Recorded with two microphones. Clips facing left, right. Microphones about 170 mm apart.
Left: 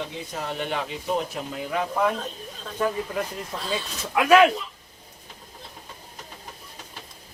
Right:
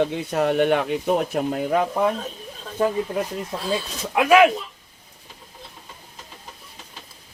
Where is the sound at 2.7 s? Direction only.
30° right (ahead or behind).